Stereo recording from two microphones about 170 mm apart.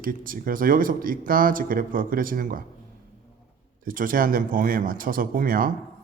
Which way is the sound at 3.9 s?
55° right (ahead or behind).